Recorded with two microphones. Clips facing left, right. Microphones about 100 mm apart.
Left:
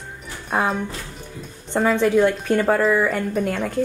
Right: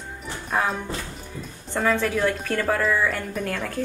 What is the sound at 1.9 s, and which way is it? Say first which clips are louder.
A woman's voice: left 5 dB; 20° left (ahead or behind).